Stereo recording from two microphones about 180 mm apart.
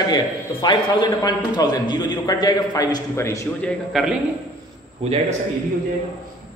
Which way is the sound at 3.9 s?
Centre (ahead or behind).